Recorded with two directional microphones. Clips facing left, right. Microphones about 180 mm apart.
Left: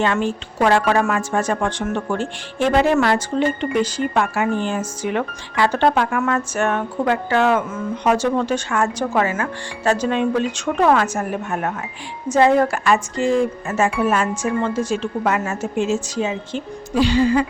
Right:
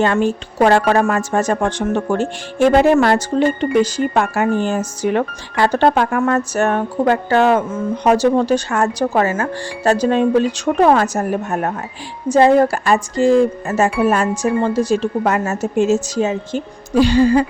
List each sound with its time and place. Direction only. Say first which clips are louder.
0.0 s speech: right 4 dB; 45° right (ahead or behind)